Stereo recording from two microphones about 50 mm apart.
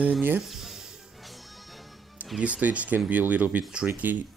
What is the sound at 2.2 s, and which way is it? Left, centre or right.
Music, right.